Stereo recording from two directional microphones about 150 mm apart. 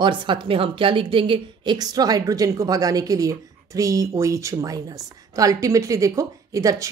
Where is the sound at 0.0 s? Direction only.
30° right (ahead or behind).